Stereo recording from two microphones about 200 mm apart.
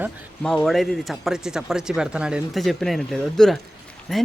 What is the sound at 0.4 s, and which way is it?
Speech, centre (ahead or behind).